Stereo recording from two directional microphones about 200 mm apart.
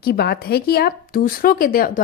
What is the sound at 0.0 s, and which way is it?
A woman's voice, 50° left (ahead or behind).